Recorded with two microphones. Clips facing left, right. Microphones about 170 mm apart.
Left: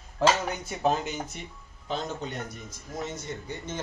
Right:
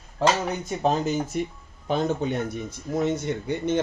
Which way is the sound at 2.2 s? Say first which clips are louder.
Right 9 dB; 65° right (ahead or behind).